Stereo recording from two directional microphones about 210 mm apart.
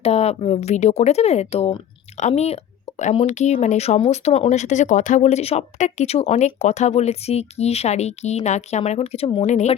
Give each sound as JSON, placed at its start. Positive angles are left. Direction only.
{"t": 0.0, "sound": "speech", "side_deg": 30}